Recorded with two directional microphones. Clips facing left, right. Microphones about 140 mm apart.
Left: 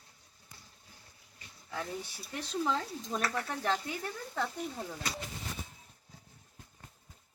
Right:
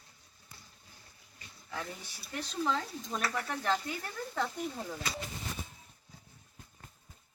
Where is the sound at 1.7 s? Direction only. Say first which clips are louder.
Left 3 dB; 20° left (ahead or behind).